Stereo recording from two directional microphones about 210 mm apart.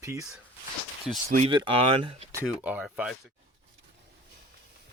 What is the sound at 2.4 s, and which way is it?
Speech, 5° right (ahead or behind).